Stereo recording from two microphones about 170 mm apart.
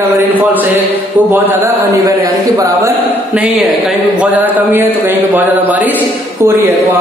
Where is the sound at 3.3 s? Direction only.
5° right (ahead or behind).